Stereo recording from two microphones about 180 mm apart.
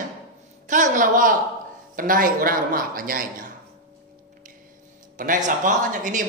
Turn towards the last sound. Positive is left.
turn(degrees=-45)  # may be behind; listen again after turning